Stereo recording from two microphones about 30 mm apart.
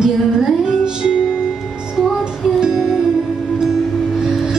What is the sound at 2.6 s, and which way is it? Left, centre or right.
Music, right.